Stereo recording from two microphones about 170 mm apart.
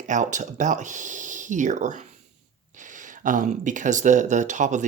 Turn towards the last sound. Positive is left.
turn(degrees=-45)  # may be behind; listen again after turning